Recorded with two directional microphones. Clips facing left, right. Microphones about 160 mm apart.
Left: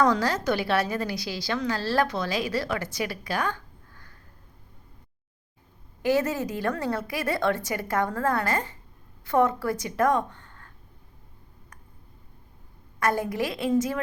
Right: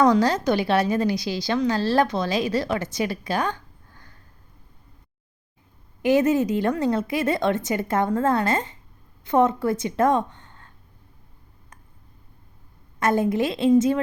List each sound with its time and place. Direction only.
0.0 s a woman's voice: 20° right (ahead or behind)
6.0 s a woman's voice: 20° right (ahead or behind)
13.0 s a woman's voice: 20° right (ahead or behind)